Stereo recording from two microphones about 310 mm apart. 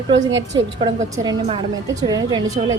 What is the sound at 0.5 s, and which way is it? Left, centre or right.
A woman's voice, centre.